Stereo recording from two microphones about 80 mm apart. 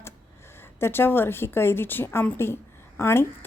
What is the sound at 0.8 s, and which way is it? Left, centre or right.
A woman's voice, left.